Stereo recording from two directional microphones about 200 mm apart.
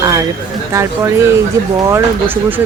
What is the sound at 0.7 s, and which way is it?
Speech, 15° right (ahead or behind).